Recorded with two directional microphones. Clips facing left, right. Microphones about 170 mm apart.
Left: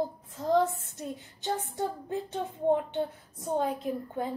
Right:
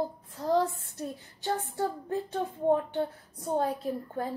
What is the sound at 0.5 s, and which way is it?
A woman's voice, 20° left (ahead or behind).